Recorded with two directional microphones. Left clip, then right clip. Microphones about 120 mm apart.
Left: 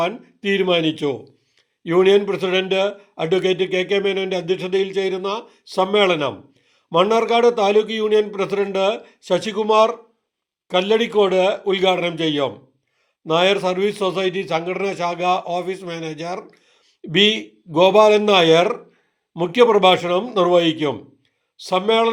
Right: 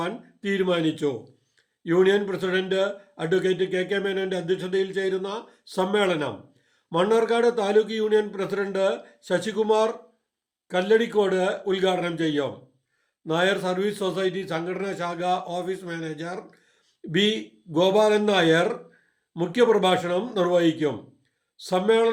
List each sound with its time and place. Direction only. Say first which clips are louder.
0.0 s a man's voice: left 8 dB; 15° left (ahead or behind)